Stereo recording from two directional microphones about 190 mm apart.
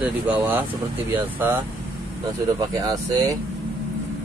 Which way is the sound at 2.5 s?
20° right (ahead or behind).